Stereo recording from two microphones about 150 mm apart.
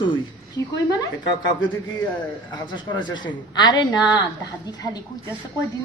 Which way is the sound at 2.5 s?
30° left (ahead or behind).